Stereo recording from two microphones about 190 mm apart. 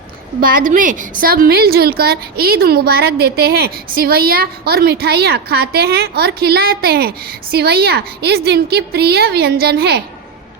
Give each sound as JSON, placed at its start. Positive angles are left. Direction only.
{"t": 0.3, "sound": "a woman's voice", "side_deg": -45}